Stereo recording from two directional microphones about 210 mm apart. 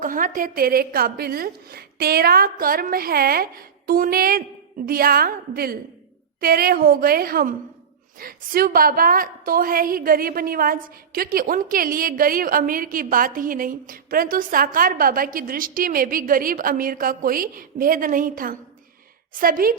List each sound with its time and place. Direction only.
0.0 s a woman's voice: 40° right (ahead or behind)